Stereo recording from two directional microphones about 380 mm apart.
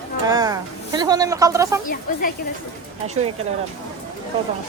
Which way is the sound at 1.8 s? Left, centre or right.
Left.